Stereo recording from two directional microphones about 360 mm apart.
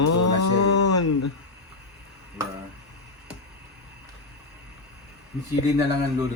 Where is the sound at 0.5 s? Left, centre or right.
Left.